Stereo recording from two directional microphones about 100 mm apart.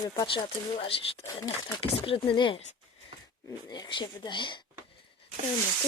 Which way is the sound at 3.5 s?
40° left (ahead or behind).